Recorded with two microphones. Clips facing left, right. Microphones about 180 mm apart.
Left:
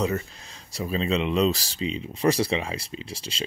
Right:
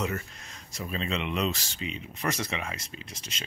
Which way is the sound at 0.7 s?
35° left (ahead or behind).